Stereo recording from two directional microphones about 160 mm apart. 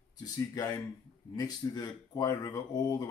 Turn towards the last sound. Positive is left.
turn(degrees=25)  # may be behind; listen again after turning